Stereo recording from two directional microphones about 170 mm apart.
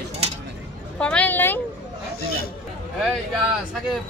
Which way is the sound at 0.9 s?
5° left (ahead or behind).